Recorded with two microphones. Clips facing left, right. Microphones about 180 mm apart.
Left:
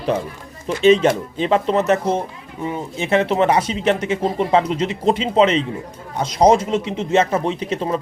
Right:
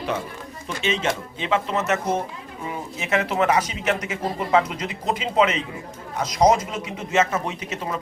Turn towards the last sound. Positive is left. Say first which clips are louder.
# left 8 dB
turn(degrees=30)  # may be behind; listen again after turning